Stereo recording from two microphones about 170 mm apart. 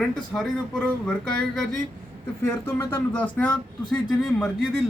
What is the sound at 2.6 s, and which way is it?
Speech, 15° left (ahead or behind).